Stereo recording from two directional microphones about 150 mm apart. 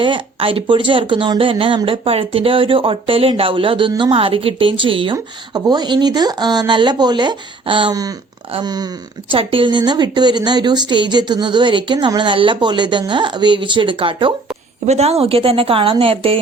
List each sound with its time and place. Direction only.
0.0 s speech: 35° right (ahead or behind)